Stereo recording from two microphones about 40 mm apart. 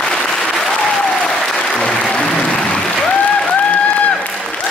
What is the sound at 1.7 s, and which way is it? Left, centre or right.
Applause, left.